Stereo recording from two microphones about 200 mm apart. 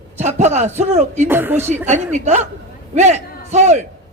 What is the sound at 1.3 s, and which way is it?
Speech, 10° right (ahead or behind).